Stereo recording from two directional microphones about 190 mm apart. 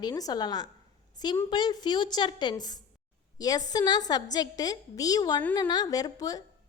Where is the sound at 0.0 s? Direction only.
20° left (ahead or behind).